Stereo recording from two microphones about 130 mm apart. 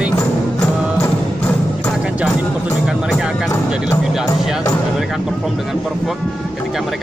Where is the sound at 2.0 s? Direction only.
10° right (ahead or behind).